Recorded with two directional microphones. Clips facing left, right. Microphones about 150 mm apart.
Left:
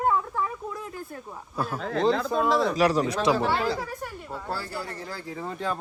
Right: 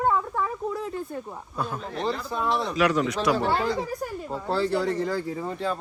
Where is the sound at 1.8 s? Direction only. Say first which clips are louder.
Left 9 dB; 90° left.